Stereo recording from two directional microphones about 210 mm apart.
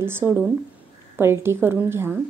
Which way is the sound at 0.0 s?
10° right (ahead or behind).